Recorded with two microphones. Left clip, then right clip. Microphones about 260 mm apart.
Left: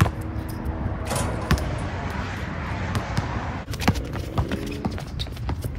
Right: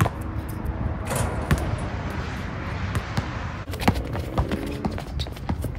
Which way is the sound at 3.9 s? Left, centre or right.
Right.